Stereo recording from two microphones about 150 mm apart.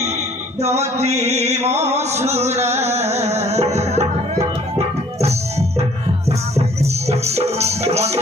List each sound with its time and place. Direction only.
0.6 s music: 45° right (ahead or behind)